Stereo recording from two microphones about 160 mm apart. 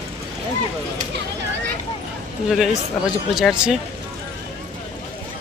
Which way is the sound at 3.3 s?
Centre (ahead or behind).